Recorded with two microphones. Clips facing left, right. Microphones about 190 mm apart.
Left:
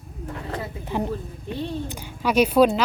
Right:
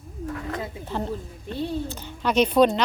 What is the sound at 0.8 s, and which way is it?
A woman's voice, 15° left (ahead or behind).